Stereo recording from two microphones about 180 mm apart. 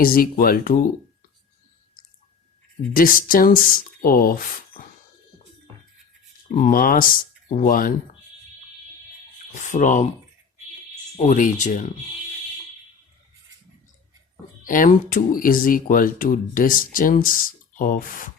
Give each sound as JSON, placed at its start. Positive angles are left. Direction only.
{"t": 0.0, "sound": "speech", "side_deg": 55}
{"t": 2.9, "sound": "speech", "side_deg": 50}
{"t": 6.5, "sound": "speech", "side_deg": 50}
{"t": 9.6, "sound": "speech", "side_deg": 45}
{"t": 11.2, "sound": "speech", "side_deg": 45}
{"t": 14.6, "sound": "speech", "side_deg": 50}